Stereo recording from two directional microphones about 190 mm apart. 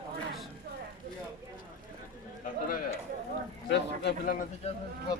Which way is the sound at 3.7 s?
60° left (ahead or behind).